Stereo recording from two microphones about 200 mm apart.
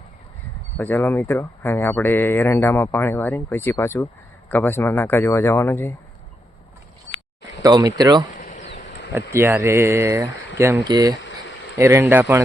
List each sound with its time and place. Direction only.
0.8 s speech: 10° left (ahead or behind)
7.6 s speech: 20° right (ahead or behind)
8.4 s a sound: 40° left (ahead or behind)
9.1 s speech: 10° right (ahead or behind)
11.2 s a sound: 65° left (ahead or behind)
11.8 s speech: 10° right (ahead or behind)